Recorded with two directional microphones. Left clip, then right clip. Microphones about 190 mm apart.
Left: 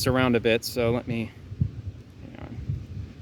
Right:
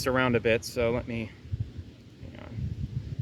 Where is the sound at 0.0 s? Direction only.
50° left (ahead or behind).